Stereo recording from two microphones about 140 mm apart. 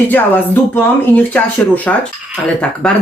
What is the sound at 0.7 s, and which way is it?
Speech, 15° left (ahead or behind).